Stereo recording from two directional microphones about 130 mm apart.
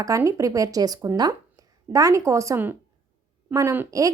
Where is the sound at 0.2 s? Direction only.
25° right (ahead or behind).